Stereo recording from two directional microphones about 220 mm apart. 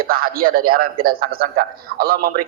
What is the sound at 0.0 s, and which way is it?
A man's voice, 40° right (ahead or behind).